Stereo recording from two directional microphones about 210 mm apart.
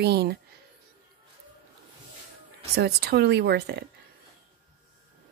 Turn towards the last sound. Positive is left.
turn(degrees=-50)  # may be behind; listen again after turning